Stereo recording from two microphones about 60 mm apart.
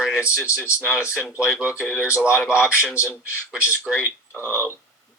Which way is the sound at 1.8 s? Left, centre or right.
Centre.